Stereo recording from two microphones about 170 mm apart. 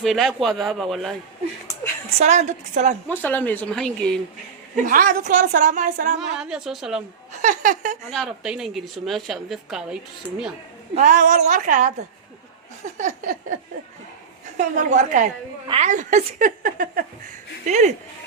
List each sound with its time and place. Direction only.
0.0 s a woman's voice: centre (ahead or behind)
2.0 s a woman's voice: 40° right (ahead or behind)
3.2 s speech: 10° left (ahead or behind)
4.9 s a woman's voice: 50° right (ahead or behind)
6.1 s a woman's voice: 5° right (ahead or behind)
7.4 s a woman's voice: 50° right (ahead or behind)
8.1 s a woman's voice: centre (ahead or behind)
10.9 s a woman's voice: 45° right (ahead or behind)
13.0 s a woman's voice: 45° right (ahead or behind)
14.6 s a woman's voice: 45° right (ahead or behind)
17.7 s a woman's voice: 45° right (ahead or behind)